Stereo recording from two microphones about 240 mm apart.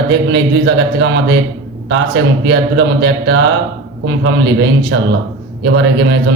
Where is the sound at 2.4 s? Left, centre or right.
Right.